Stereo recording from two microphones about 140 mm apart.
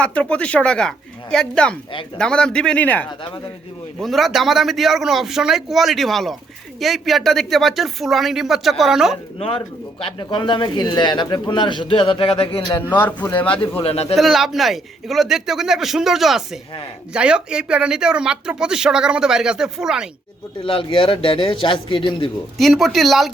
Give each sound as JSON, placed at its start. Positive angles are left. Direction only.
{"t": 0.0, "sound": "speech", "side_deg": 10}
{"t": 4.0, "sound": "speech", "side_deg": 0}
{"t": 10.0, "sound": "speech", "side_deg": 35}
{"t": 12.9, "sound": "speech", "side_deg": 10}
{"t": 13.8, "sound": "speech", "side_deg": 50}
{"t": 14.2, "sound": "speech", "side_deg": 0}
{"t": 20.7, "sound": "speech", "side_deg": 40}
{"t": 22.5, "sound": "speech", "side_deg": 0}